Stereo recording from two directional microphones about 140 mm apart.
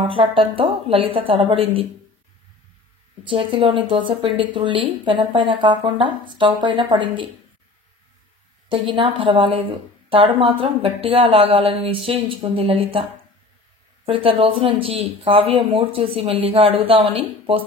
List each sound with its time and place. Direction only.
0.0 s a woman's voice: 40° right (ahead or behind)
3.3 s a woman's voice: 40° right (ahead or behind)
8.6 s a woman's voice: 40° right (ahead or behind)
14.0 s a woman's voice: 40° right (ahead or behind)